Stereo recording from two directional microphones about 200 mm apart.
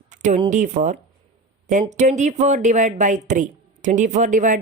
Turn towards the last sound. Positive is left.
turn(degrees=-40)  # may be behind; listen again after turning